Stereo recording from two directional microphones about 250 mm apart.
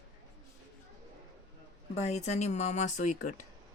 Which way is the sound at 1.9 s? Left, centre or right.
Left.